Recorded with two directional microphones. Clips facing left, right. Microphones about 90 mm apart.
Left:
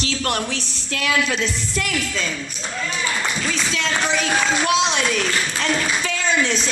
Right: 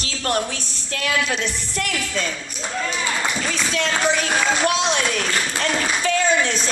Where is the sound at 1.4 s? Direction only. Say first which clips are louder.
Left 1 dB; 50° right (ahead or behind).